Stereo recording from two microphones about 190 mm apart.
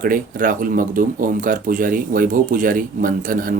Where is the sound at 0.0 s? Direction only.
45° right (ahead or behind).